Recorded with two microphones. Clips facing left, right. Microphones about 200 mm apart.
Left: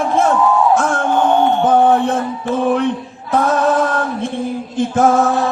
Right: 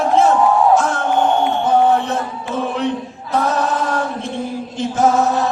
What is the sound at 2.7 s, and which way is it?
Chant, 50° left (ahead or behind).